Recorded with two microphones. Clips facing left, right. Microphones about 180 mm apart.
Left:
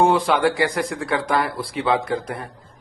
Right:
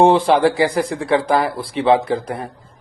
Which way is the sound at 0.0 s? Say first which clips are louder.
Right 5 dB; 30° right (ahead or behind).